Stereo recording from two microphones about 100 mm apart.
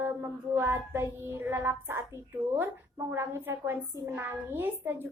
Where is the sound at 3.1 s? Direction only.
25° right (ahead or behind).